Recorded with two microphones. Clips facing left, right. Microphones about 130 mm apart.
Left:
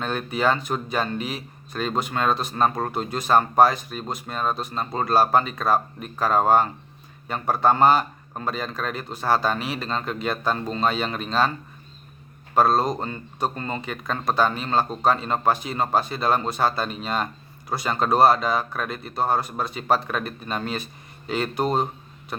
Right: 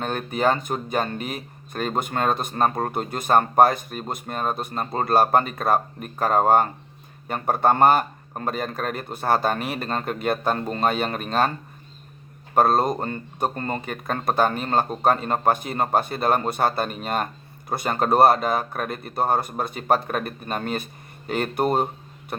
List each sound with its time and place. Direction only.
0.0 s speech: 45° right (ahead or behind)
12.5 s speech: 50° right (ahead or behind)